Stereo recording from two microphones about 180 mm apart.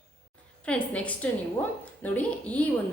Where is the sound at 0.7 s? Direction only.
5° left (ahead or behind).